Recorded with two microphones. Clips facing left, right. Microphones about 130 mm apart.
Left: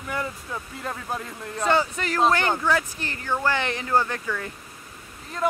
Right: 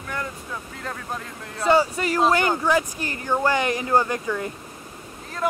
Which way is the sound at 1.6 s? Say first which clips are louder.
Right 4 dB; 10° right (ahead or behind).